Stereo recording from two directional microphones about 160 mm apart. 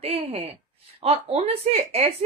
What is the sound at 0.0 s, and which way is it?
A woman's voice, 40° right (ahead or behind).